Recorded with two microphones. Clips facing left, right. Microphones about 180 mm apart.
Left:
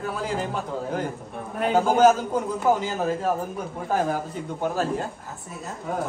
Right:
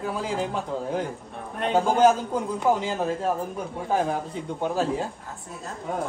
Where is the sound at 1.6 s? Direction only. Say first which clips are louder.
Left 1 dB; 5° left (ahead or behind).